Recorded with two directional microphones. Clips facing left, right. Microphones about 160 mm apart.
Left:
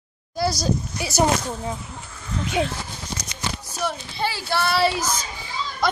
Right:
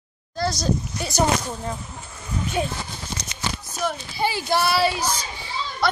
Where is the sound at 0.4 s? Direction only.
10° left (ahead or behind).